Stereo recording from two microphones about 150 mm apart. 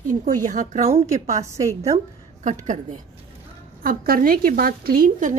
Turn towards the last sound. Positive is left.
turn(degrees=-65)  # may be behind; listen again after turning